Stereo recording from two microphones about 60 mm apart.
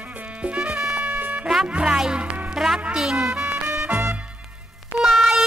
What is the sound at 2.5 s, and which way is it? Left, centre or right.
Music, centre.